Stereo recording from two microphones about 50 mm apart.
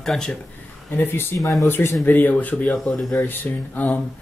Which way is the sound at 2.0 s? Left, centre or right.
Left.